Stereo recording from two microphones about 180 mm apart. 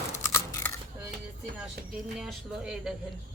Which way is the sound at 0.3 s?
15° left (ahead or behind).